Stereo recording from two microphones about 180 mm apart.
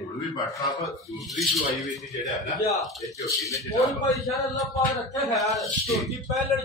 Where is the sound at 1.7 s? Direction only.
45° left (ahead or behind).